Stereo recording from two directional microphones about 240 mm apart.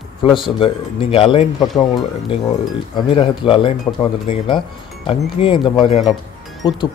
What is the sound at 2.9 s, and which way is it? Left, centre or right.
Speech, left.